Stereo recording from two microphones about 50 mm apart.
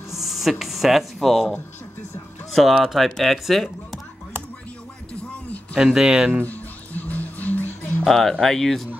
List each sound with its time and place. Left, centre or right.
0.1 s a sound: centre
2.5 s speech: centre
5.9 s speech: centre
6.4 s music: left
8.0 s speech: centre